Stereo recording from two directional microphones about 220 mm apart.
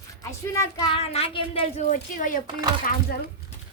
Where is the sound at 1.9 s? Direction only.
40° left (ahead or behind).